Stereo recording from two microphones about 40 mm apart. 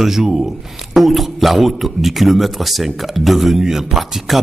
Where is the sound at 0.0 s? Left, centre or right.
Centre.